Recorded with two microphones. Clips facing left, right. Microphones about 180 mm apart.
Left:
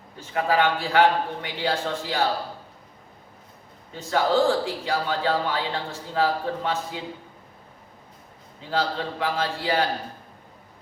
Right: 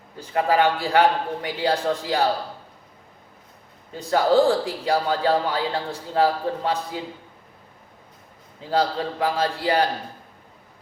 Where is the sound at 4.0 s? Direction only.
35° right (ahead or behind).